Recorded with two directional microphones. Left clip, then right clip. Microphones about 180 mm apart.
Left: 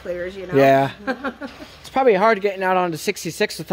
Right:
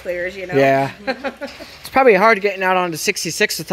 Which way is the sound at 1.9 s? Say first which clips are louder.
Right 4 dB; 15° right (ahead or behind).